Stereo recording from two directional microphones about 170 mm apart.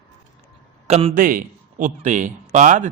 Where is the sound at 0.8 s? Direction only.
40° right (ahead or behind).